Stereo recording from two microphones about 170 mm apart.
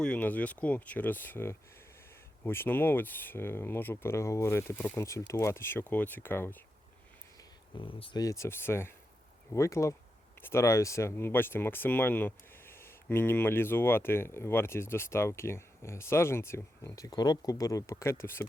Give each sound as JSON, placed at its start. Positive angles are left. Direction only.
{"t": 0.0, "sound": "speech", "side_deg": 10}
{"t": 7.8, "sound": "speech", "side_deg": 30}